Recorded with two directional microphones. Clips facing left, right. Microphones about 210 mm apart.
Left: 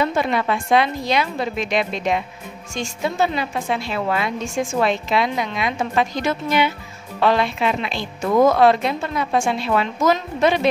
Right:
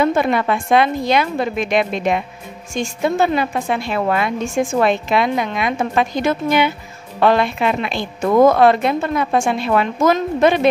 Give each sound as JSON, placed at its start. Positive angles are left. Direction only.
{"t": 0.0, "sound": "a woman's voice", "side_deg": -55}